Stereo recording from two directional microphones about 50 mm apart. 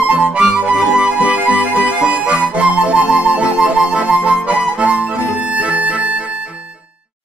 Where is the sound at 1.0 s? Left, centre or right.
Right.